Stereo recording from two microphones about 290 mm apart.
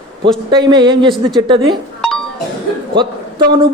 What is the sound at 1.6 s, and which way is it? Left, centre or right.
Music, centre.